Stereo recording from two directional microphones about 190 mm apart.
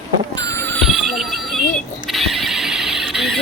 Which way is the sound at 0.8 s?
Centre (ahead or behind).